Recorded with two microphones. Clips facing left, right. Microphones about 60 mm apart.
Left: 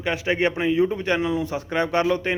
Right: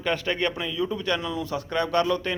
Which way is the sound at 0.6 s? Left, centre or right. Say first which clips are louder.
Left 7 dB; left.